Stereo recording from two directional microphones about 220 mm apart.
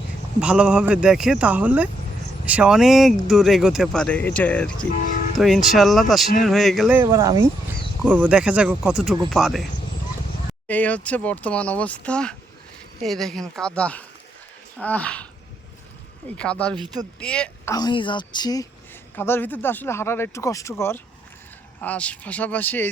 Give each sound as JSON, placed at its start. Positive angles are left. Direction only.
{"t": 0.3, "sound": "speech", "side_deg": -5}
{"t": 10.7, "sound": "speech", "side_deg": 5}
{"t": 16.4, "sound": "speech", "side_deg": 5}
{"t": 17.7, "sound": "speech", "side_deg": 20}